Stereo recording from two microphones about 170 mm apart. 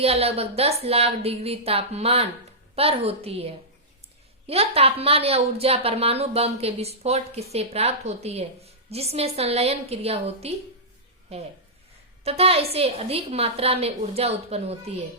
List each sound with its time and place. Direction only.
0.0 s a woman's voice: 35° right (ahead or behind)